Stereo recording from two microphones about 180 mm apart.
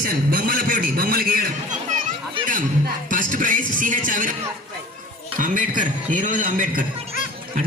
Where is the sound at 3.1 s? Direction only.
50° right (ahead or behind).